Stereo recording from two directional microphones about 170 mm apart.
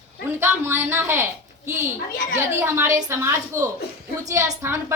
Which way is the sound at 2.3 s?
15° right (ahead or behind).